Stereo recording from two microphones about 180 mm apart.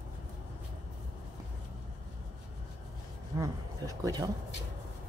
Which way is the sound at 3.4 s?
20° right (ahead or behind).